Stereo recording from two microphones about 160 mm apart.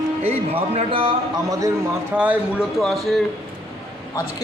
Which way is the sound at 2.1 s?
10° right (ahead or behind).